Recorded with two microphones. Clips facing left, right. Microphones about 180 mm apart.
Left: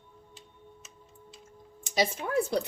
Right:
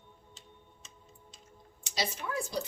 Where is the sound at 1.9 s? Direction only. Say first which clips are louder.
Left 7 dB; 55° left (ahead or behind).